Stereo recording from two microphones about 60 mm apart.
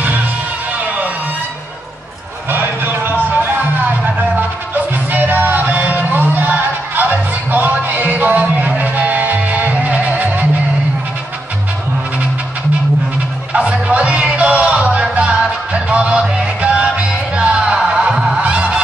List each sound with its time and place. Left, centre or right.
2.5 s a sound: right
5.1 s music: right
13.5 s music: centre